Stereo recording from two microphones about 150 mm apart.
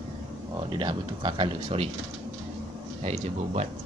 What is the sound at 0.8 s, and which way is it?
Speech, 35° right (ahead or behind).